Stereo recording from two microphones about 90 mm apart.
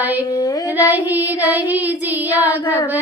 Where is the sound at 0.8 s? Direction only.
20° right (ahead or behind).